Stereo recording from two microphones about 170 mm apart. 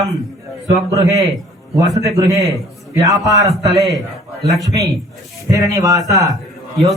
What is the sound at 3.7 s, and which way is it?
Speech, centre (ahead or behind).